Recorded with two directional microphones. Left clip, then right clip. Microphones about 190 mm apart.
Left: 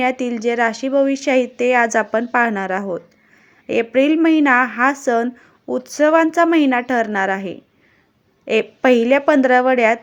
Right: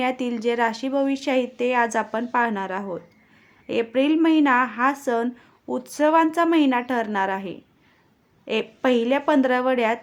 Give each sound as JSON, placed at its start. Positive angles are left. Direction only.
{"t": 0.0, "sound": "speech", "side_deg": 15}